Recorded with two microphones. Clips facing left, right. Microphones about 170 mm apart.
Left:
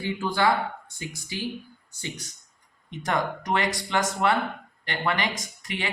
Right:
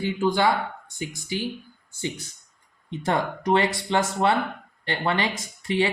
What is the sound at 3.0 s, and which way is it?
Speech, 30° right (ahead or behind).